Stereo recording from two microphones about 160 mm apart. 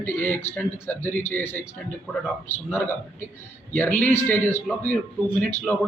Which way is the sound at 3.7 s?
15° left (ahead or behind).